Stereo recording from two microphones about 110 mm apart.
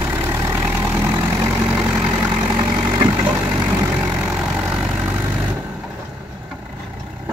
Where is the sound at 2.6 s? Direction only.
25° right (ahead or behind).